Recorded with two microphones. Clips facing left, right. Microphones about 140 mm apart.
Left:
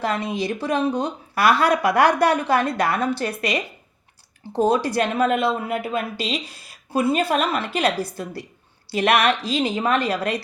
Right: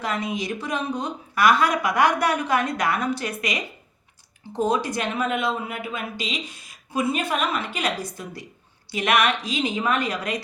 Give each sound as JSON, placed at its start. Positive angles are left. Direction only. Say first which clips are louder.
{"t": 0.0, "sound": "speech", "louder": "left 3 dB", "side_deg": 30}